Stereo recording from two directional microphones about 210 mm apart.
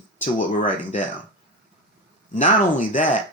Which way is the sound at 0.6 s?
35° left (ahead or behind).